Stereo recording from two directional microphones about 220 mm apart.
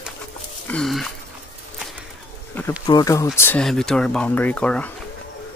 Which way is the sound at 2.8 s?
15° left (ahead or behind).